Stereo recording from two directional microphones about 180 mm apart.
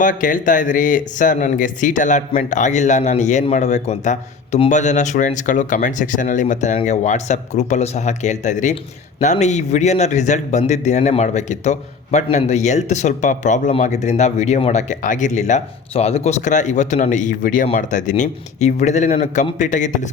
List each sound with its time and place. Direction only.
0.0 s a man's voice: 45° left (ahead or behind)